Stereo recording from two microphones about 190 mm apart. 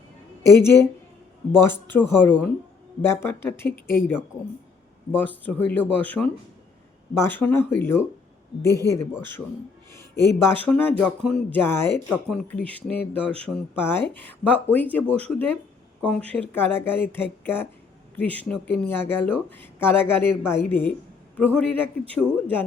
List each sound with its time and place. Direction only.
0.6 s speech: 15° left (ahead or behind)
5.2 s speech: 10° left (ahead or behind)